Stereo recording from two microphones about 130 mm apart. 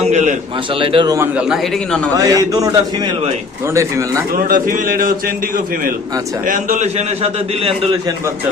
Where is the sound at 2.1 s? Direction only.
25° right (ahead or behind).